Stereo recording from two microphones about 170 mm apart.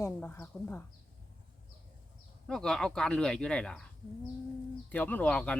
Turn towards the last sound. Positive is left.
turn(degrees=5)  # may be behind; listen again after turning